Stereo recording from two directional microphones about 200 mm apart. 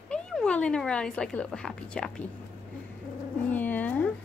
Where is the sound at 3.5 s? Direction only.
10° left (ahead or behind).